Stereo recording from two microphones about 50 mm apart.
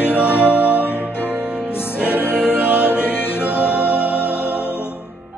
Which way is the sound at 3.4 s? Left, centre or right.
Left.